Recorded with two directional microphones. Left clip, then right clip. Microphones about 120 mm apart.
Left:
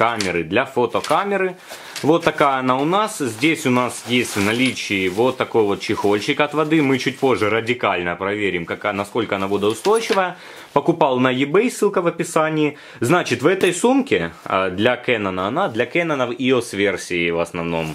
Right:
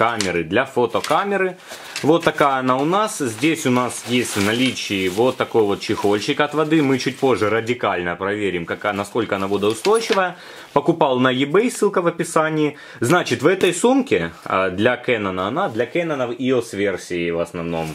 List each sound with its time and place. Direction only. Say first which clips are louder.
0.0 s speech: even; centre (ahead or behind)
15.8 s speech: left 2 dB; 35° left (ahead or behind)